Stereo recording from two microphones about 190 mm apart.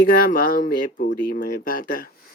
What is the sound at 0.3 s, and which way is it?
Speech, 45° left (ahead or behind).